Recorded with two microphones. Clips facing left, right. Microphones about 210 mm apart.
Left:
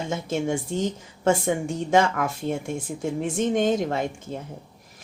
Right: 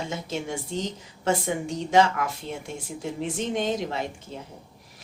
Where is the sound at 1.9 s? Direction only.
50° left (ahead or behind).